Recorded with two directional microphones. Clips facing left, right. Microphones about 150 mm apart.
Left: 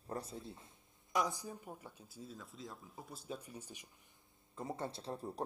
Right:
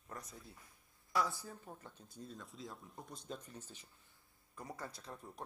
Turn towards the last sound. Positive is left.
turn(degrees=35)  # may be behind; listen again after turning